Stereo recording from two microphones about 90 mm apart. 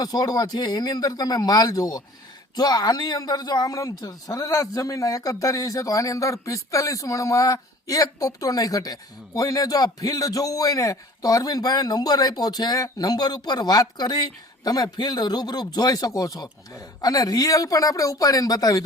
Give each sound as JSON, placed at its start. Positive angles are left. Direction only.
{"t": 0.0, "sound": "speech", "side_deg": 45}